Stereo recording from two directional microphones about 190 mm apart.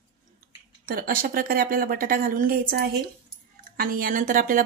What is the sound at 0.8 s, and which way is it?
Speech, 50° right (ahead or behind).